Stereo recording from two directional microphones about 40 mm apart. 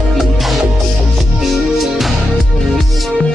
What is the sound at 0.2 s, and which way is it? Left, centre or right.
Music, centre.